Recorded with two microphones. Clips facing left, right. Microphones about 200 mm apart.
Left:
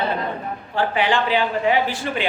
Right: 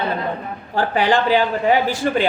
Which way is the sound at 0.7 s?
40° right (ahead or behind).